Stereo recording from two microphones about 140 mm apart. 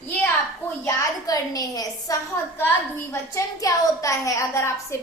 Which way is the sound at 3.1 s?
25° left (ahead or behind).